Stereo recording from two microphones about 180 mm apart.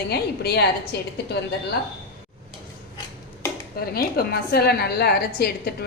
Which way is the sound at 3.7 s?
55° left (ahead or behind).